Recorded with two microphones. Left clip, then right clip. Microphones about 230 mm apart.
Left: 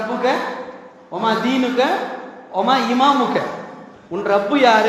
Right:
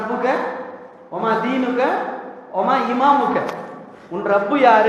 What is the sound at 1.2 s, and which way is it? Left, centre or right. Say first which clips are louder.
A man's voice: left 1 dB; left.